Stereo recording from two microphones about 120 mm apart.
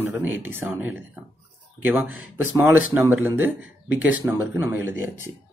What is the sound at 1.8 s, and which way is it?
Speech, 15° right (ahead or behind).